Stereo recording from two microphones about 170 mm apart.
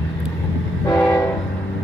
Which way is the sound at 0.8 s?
15° left (ahead or behind).